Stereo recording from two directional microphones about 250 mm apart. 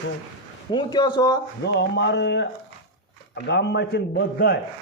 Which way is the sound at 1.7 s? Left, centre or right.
Left.